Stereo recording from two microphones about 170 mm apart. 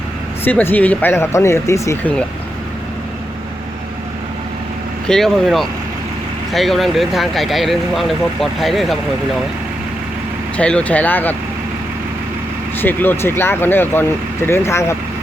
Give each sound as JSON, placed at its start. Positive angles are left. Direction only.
{"t": 0.4, "sound": "speech", "side_deg": 10}
{"t": 5.0, "sound": "speech", "side_deg": 5}
{"t": 10.6, "sound": "speech", "side_deg": 5}
{"t": 12.8, "sound": "speech", "side_deg": 10}